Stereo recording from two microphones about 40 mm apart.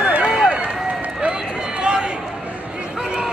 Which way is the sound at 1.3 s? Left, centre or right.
Centre.